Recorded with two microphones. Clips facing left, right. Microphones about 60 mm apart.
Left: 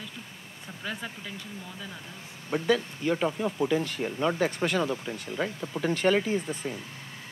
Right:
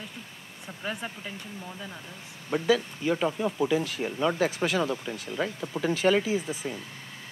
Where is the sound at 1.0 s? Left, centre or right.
Right.